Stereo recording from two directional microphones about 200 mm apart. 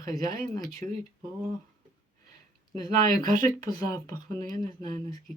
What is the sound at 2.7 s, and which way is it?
Speech, 20° left (ahead or behind).